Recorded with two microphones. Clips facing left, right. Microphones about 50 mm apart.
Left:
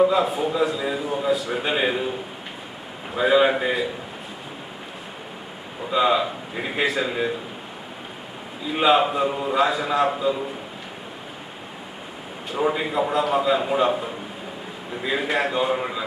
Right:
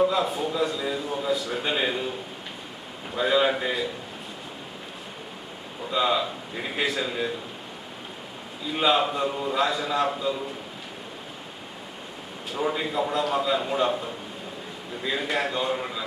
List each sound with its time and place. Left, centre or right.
0.0 s a man's voice: centre
3.2 s a man's voice: centre
5.9 s a man's voice: centre
8.6 s a man's voice: centre
12.5 s a man's voice: centre
15.8 s a man's voice: centre